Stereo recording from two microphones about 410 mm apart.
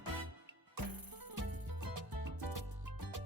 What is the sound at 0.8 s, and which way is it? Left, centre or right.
Music, right.